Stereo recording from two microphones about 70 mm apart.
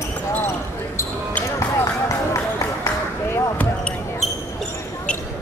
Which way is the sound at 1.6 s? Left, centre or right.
Left.